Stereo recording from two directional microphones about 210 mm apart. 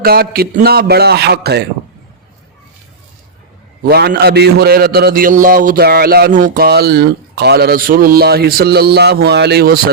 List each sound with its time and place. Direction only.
0.0 s a man's voice: 45° right (ahead or behind)
3.8 s a man's voice: 50° right (ahead or behind)